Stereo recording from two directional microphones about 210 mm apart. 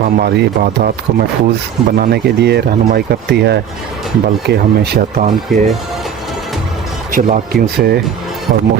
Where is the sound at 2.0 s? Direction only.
50° right (ahead or behind).